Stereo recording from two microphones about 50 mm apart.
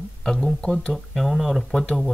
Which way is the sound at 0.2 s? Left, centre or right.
Centre.